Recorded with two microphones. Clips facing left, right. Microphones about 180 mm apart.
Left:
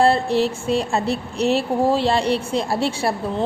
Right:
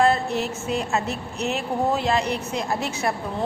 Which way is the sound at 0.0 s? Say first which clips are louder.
Left 4 dB; 30° left (ahead or behind).